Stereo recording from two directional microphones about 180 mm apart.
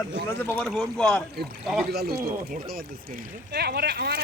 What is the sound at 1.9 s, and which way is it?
Speech, 60° right (ahead or behind).